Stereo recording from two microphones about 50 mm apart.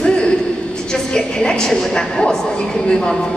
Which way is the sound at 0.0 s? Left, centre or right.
Centre.